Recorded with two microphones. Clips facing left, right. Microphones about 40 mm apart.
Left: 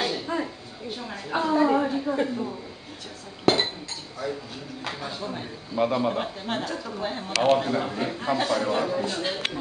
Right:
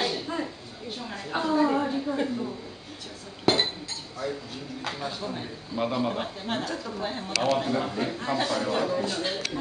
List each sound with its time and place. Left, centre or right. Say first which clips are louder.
0.0 s a sound: left 2 dB; centre
2.0 s a man's voice: left 2 dB; centre
3.4 s chink: left 2 dB; centre
4.8 s a man's voice: even; centre